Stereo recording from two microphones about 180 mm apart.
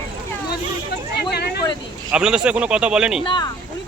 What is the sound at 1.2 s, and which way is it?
Speech, 60° left (ahead or behind).